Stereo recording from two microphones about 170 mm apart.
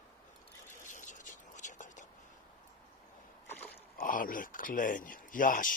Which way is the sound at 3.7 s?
60° left (ahead or behind).